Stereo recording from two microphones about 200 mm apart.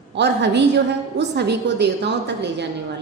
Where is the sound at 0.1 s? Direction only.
60° right (ahead or behind).